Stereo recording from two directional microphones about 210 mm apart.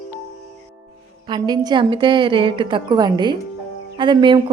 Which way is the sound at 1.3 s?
20° right (ahead or behind).